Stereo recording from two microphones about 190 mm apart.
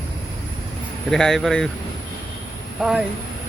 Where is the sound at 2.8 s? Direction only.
Centre (ahead or behind).